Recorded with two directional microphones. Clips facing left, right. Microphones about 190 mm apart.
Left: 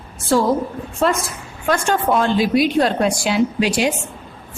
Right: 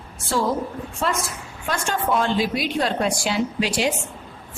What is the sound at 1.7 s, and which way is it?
A woman's voice, 50° left (ahead or behind).